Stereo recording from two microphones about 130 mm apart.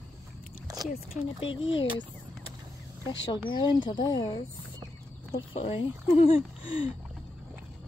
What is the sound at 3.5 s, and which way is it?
Speech, 35° left (ahead or behind).